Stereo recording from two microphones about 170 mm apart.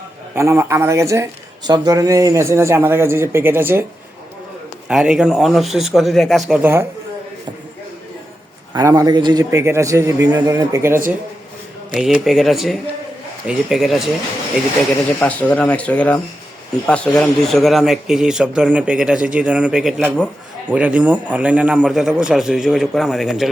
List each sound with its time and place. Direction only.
0.3 s speech: 15° right (ahead or behind)
4.9 s a man's voice: 5° right (ahead or behind)
6.5 s speech: 10° right (ahead or behind)
8.7 s a man's voice: 20° right (ahead or behind)
11.9 s a man's voice: centre (ahead or behind)
15.2 s a man's voice: 10° left (ahead or behind)